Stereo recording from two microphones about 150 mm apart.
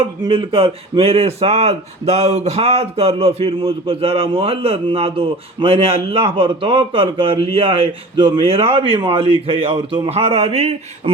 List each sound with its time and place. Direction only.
0.0 s speech: 35° right (ahead or behind)